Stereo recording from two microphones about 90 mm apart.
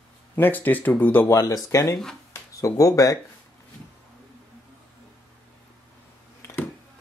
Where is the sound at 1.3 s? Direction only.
40° left (ahead or behind).